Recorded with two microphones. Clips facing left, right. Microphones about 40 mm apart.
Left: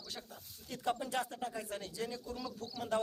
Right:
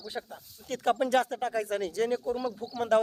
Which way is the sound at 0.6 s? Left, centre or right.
Right.